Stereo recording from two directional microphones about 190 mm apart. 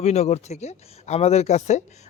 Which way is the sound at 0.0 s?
35° left (ahead or behind).